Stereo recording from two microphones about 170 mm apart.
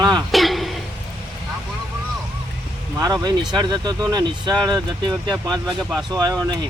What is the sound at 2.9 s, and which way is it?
Speech, 20° right (ahead or behind).